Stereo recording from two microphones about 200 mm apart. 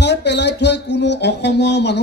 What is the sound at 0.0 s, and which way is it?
Music, 60° left (ahead or behind).